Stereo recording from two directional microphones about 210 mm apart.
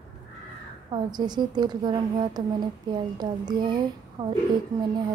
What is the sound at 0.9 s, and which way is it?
Speech, 20° right (ahead or behind).